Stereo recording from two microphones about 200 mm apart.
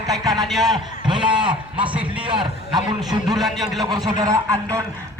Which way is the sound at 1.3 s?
25° right (ahead or behind).